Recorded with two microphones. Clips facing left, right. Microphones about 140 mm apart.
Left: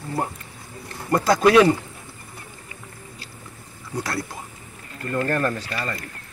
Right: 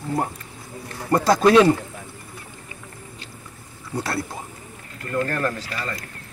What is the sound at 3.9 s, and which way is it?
Speech, 25° right (ahead or behind).